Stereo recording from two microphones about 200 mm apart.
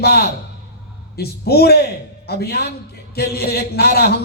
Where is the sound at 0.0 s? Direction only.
50° left (ahead or behind).